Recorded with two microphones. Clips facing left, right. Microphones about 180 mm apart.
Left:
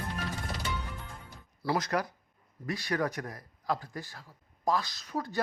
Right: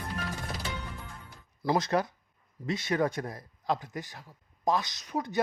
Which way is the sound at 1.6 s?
25° right (ahead or behind).